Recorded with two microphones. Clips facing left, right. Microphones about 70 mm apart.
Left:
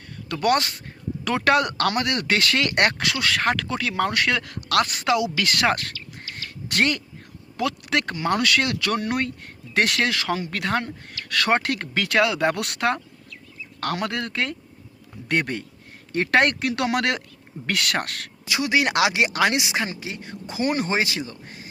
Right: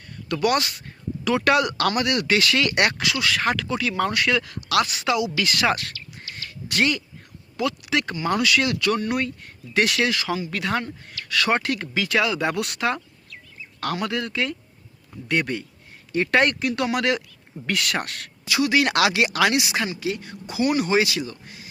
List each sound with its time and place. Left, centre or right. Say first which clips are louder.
0.4 s speech: left 1 dB; left
6.3 s a sound: left 1 dB; left
7.5 s speech: even; left
18.4 s speech: right 2 dB; left